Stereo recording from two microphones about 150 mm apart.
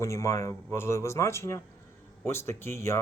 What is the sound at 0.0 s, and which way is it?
Speech, 20° left (ahead or behind).